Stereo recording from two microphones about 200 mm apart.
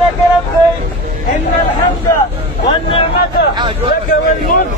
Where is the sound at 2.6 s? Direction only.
25° left (ahead or behind).